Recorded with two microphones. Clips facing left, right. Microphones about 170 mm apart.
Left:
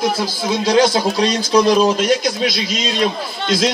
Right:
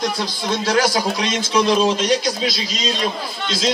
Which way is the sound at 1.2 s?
35° left (ahead or behind).